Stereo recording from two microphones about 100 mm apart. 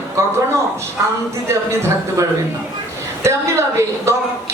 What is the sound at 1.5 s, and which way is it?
Speech, 30° right (ahead or behind).